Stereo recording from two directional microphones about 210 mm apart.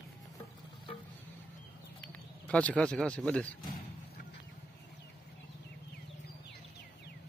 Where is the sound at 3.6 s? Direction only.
40° left (ahead or behind).